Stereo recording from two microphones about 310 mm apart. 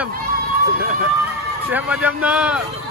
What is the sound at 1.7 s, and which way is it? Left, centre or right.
Speech, centre.